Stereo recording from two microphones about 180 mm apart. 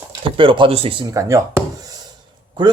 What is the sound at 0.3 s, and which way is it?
Speech, 25° right (ahead or behind).